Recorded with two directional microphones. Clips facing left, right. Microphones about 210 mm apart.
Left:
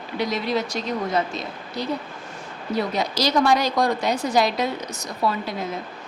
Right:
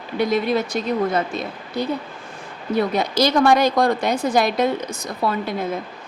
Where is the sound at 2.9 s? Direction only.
55° right (ahead or behind).